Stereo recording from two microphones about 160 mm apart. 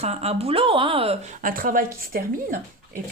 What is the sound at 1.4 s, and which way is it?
Speech, 60° right (ahead or behind).